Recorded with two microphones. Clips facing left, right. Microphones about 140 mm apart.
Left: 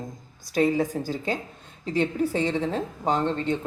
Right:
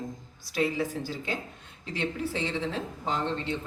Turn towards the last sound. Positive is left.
turn(degrees=45)  # may be behind; listen again after turning